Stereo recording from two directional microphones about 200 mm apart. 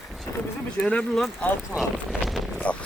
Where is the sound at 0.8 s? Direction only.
5° left (ahead or behind).